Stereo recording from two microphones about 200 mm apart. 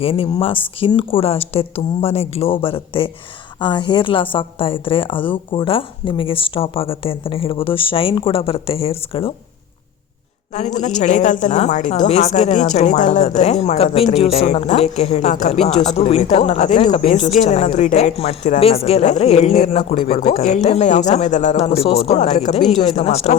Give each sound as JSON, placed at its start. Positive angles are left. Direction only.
{"t": 0.0, "sound": "a woman's voice", "side_deg": 30}
{"t": 10.5, "sound": "a woman's voice", "side_deg": 35}